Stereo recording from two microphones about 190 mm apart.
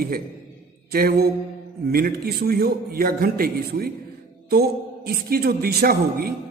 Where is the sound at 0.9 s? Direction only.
55° right (ahead or behind).